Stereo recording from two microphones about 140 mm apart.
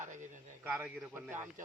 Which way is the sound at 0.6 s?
10° right (ahead or behind).